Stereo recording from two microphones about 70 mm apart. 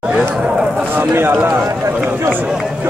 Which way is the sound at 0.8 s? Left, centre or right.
Right.